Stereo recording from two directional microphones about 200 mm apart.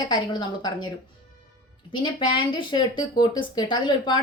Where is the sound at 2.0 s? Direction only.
25° left (ahead or behind).